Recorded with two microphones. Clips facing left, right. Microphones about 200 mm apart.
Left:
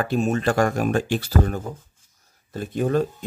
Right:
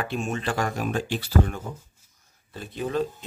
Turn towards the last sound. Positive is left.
turn(degrees=50)  # may be behind; listen again after turning